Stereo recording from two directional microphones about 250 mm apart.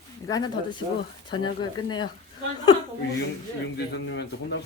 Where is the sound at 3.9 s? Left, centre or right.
Left.